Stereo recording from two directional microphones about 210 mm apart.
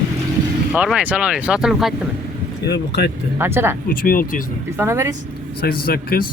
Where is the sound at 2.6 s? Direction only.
50° left (ahead or behind).